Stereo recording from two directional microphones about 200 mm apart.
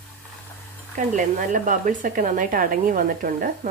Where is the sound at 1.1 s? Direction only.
40° right (ahead or behind).